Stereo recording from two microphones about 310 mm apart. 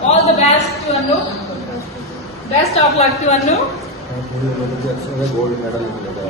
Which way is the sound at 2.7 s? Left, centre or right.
Left.